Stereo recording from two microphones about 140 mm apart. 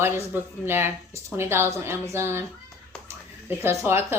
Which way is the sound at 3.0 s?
15° right (ahead or behind).